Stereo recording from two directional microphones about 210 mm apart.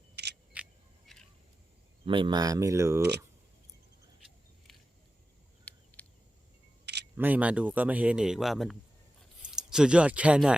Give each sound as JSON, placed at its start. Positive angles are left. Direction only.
{"t": 0.2, "sound": "single-lens reflex camera", "side_deg": -55}
{"t": 0.5, "sound": "a sound", "side_deg": 0}
{"t": 2.0, "sound": "speech", "side_deg": -25}
{"t": 5.6, "sound": "a sound", "side_deg": 5}
{"t": 6.8, "sound": "camera", "side_deg": -55}
{"t": 7.2, "sound": "speech", "side_deg": -5}